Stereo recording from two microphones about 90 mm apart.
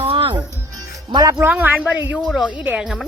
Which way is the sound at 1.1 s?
45° right (ahead or behind).